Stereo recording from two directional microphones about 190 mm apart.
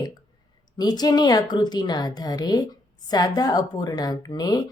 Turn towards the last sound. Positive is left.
turn(degrees=20)  # may be behind; listen again after turning